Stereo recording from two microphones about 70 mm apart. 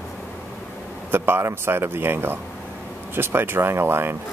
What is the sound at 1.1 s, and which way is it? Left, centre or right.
Speech, right.